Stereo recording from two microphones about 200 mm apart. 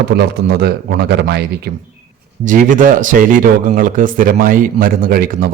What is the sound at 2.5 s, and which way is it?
A man's voice, 40° right (ahead or behind).